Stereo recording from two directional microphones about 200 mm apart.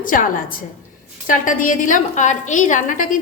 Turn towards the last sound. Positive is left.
turn(degrees=40)  # may be behind; listen again after turning